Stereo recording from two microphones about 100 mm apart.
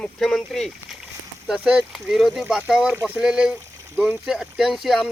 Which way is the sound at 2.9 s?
25° right (ahead or behind).